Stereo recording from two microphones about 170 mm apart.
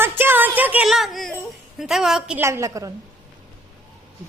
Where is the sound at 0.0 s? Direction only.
15° right (ahead or behind).